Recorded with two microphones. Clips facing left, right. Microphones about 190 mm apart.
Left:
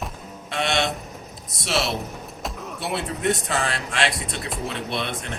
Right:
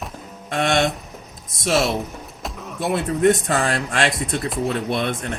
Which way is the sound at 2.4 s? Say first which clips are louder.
Even; centre (ahead or behind).